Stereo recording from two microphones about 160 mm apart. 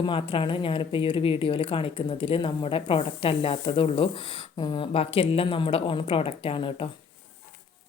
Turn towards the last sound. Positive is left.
turn(degrees=35)  # may be behind; listen again after turning